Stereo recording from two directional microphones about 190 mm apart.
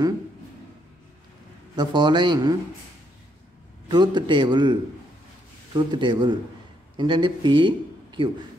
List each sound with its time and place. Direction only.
1.8 s a man's voice: 25° right (ahead or behind)
3.9 s a man's voice: 25° right (ahead or behind)